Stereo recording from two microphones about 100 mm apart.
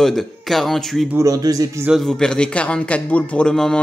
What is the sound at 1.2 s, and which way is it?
Speech, 35° right (ahead or behind).